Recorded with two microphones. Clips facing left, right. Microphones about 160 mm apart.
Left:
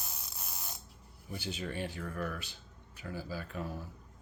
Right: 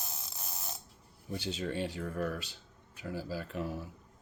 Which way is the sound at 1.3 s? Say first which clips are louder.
Right 3 dB; 70° right (ahead or behind).